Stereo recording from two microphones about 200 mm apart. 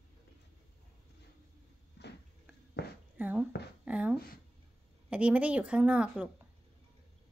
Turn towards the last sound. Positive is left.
turn(degrees=-5)  # may be behind; listen again after turning